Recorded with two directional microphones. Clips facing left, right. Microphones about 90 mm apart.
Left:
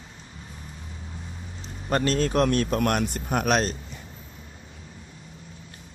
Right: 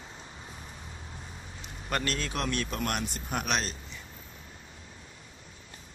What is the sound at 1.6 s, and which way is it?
A man's voice, 35° left (ahead or behind).